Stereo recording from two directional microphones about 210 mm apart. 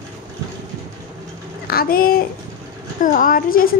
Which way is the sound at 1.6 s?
45° left (ahead or behind).